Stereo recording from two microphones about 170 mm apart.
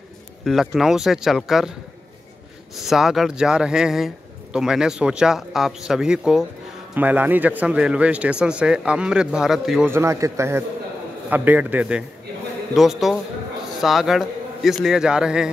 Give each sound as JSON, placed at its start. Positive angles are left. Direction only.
{"t": 0.5, "sound": "a man's voice", "side_deg": 0}
{"t": 2.8, "sound": "a man's voice", "side_deg": 0}
{"t": 9.8, "sound": "a man's voice", "side_deg": -15}